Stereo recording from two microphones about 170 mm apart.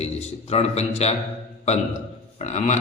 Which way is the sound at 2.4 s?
40° left (ahead or behind).